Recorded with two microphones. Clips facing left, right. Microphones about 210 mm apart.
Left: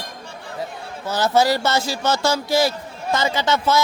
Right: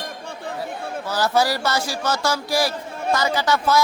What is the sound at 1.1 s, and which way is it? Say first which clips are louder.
A man's voice: left 3 dB; 20° left (ahead or behind).